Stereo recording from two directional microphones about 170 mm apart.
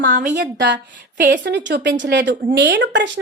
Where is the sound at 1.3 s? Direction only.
90° right.